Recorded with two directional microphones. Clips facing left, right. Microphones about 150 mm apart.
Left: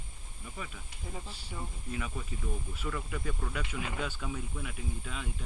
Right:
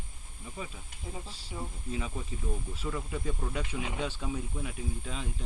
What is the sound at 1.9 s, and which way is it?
Speech, 25° right (ahead or behind).